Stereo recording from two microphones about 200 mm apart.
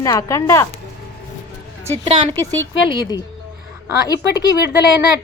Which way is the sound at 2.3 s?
10° left (ahead or behind).